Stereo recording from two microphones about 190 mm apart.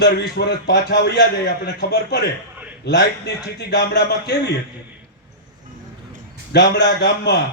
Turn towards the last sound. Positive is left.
turn(degrees=65)  # may be behind; listen again after turning